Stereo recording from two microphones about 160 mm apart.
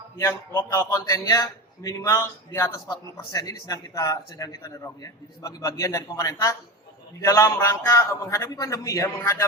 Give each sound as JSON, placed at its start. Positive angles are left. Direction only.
{"t": 0.2, "sound": "a man's voice", "side_deg": 20}